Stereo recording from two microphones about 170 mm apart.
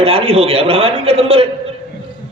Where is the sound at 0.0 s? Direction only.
35° right (ahead or behind).